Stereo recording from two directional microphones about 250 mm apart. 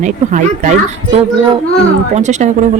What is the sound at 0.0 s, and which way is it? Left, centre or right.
Speech, right.